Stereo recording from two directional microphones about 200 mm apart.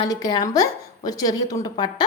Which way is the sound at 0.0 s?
20° left (ahead or behind).